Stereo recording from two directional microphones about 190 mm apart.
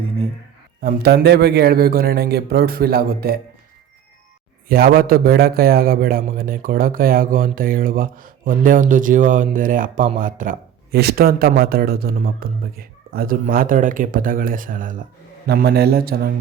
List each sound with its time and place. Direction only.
0.8 s a man's voice: 55° right (ahead or behind)
4.7 s a man's voice: 50° right (ahead or behind)
15.4 s a man's voice: 55° right (ahead or behind)